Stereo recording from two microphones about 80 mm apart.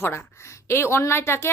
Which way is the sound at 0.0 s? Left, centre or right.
Left.